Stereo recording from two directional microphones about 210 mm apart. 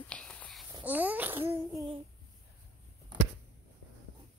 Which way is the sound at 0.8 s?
10° right (ahead or behind).